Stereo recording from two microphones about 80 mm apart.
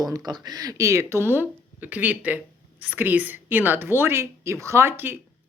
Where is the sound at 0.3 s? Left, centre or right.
Right.